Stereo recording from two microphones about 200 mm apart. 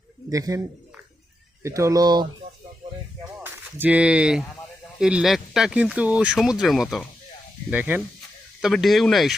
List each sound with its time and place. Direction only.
0.3 s speech: 15° right (ahead or behind)
1.6 s speech: 15° right (ahead or behind)
3.4 s speech: 10° right (ahead or behind)